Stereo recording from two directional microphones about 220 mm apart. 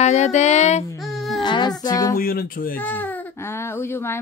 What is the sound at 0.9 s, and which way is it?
Music, centre (ahead or behind).